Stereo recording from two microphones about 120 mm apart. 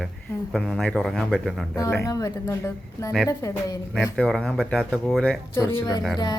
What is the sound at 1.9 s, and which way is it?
Speech, 25° left (ahead or behind).